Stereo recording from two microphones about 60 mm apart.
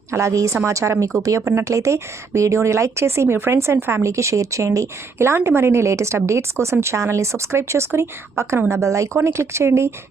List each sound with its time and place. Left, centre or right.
0.1 s a woman's voice: right
1.5 s speech: right
5.2 s speech: right